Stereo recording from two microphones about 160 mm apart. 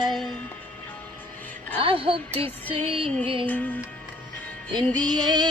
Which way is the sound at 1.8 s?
35° right (ahead or behind).